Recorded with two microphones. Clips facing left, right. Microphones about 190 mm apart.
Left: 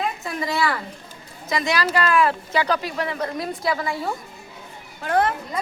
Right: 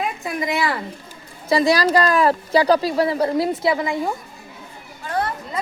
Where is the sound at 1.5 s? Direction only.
35° right (ahead or behind).